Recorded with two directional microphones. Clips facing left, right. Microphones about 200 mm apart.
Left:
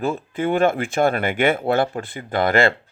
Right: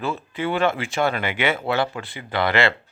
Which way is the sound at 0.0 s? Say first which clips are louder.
Left 4 dB; 50° left (ahead or behind).